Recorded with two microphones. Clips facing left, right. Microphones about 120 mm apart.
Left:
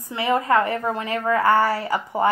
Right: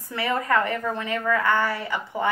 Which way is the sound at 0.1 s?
25° left (ahead or behind).